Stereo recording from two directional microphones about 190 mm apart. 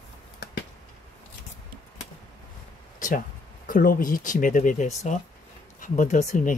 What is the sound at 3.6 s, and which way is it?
Speech, 45° left (ahead or behind).